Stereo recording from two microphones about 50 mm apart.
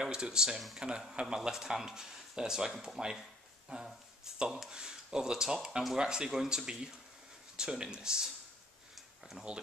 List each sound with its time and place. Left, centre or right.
0.0 s speech: centre
9.5 s speech: centre